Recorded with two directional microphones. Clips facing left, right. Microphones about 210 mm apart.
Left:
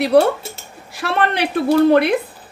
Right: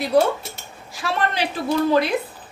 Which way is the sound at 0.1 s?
70° left (ahead or behind).